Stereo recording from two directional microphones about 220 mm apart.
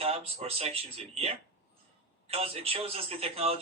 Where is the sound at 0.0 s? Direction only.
25° right (ahead or behind).